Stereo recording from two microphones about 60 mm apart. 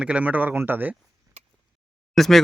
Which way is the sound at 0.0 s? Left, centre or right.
Right.